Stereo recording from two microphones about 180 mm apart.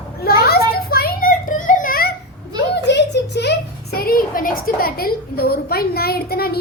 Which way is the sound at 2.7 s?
75° left (ahead or behind).